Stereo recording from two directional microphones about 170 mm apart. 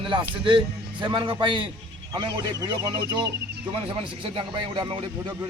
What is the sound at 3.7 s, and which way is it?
Speech, 30° right (ahead or behind).